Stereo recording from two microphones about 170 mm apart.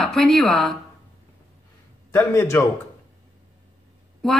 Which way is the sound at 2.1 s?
15° left (ahead or behind).